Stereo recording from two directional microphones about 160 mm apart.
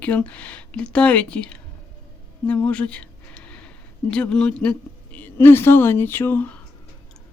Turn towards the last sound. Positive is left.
turn(degrees=15)  # may be behind; listen again after turning